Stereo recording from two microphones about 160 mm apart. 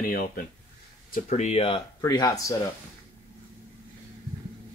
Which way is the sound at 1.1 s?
45° left (ahead or behind).